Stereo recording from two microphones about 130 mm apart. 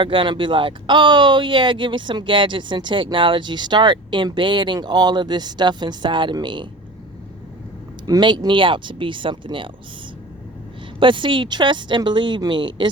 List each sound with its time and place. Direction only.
0.0 s speech: 40° right (ahead or behind)
8.0 s speech: 35° right (ahead or behind)
11.0 s speech: 40° right (ahead or behind)